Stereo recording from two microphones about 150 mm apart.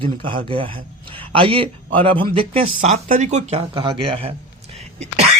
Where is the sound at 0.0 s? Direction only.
35° right (ahead or behind).